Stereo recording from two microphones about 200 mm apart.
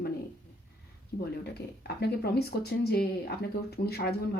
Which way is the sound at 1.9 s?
55° left (ahead or behind).